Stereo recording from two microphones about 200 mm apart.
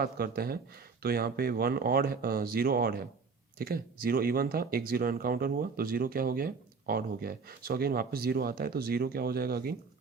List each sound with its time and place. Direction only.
0.0 s speech: 50° right (ahead or behind)